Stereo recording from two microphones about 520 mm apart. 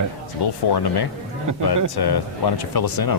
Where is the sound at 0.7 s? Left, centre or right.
Left.